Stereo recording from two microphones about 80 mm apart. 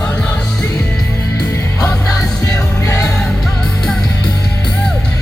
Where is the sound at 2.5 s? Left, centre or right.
Left.